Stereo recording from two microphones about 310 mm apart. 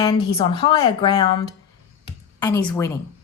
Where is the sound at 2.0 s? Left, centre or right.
Centre.